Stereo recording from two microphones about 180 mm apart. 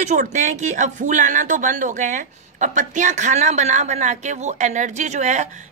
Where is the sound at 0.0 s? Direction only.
40° right (ahead or behind).